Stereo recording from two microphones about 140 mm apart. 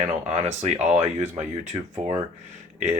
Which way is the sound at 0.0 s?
50° right (ahead or behind).